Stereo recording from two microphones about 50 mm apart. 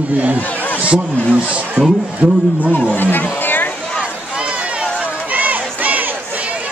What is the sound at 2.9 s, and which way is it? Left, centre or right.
Speech, left.